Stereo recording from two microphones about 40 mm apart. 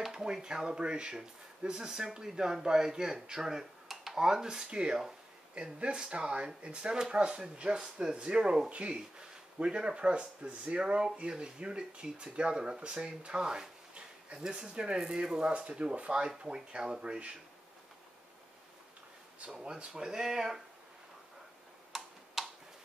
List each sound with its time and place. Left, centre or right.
0.0 s speech: centre
19.4 s speech: right
19.9 s speech: centre
21.9 s tick-tock: centre